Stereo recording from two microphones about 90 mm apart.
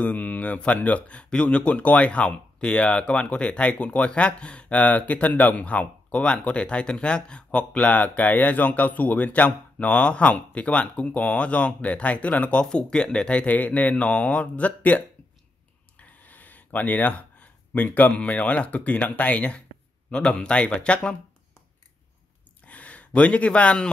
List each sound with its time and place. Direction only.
0.0 s speech: 15° left (ahead or behind)
22.7 s speech: 15° left (ahead or behind)